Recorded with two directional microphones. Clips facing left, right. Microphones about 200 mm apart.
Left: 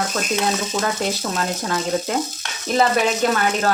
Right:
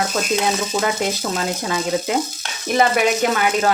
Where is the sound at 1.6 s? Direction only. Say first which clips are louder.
Right 1 dB; 15° right (ahead or behind).